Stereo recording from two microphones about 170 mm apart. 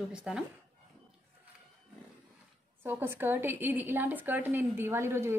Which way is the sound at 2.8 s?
15° right (ahead or behind).